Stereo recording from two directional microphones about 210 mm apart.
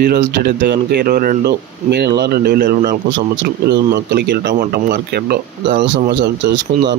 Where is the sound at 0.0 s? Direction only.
45° right (ahead or behind).